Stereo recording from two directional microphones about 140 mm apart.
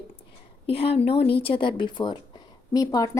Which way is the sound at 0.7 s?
45° left (ahead or behind).